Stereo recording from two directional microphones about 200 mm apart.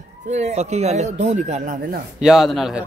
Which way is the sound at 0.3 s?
35° right (ahead or behind).